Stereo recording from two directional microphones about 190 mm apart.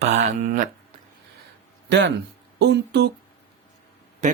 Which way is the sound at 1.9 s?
65° right (ahead or behind).